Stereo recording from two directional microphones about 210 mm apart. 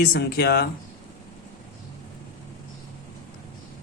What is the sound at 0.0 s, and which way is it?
Speech, 45° left (ahead or behind).